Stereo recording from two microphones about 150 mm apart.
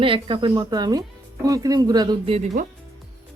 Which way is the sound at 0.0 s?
35° right (ahead or behind).